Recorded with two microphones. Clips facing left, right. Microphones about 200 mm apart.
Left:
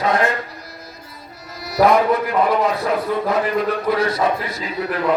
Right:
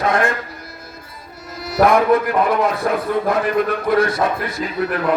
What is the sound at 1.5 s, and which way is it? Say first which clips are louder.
Music: even; 50° right (ahead or behind).